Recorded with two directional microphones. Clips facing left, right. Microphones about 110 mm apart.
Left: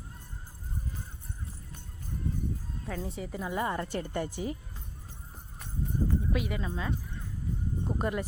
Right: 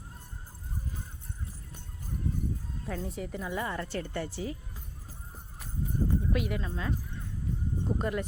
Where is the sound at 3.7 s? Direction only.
15° left (ahead or behind).